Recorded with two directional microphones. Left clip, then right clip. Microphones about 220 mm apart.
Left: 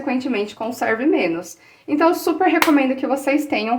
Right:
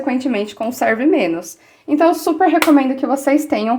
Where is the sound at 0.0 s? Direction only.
40° right (ahead or behind).